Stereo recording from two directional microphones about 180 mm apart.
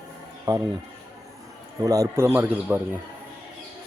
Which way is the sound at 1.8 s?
20° right (ahead or behind).